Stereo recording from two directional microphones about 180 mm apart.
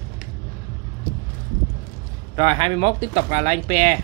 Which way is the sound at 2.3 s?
25° right (ahead or behind).